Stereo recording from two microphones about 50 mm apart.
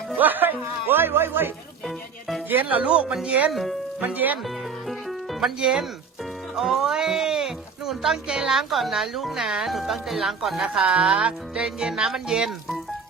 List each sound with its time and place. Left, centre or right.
0.1 s speech: right
1.8 s speech: centre
2.5 s speech: right
3.5 s speech: centre
4.0 s speech: right
4.4 s music: centre
6.6 s speech: centre
10.6 s speech: centre